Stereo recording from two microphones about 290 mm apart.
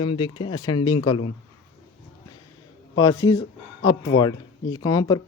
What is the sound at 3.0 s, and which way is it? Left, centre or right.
Speech, centre.